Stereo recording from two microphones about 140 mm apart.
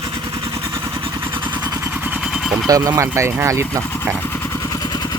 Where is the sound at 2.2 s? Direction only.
5° right (ahead or behind).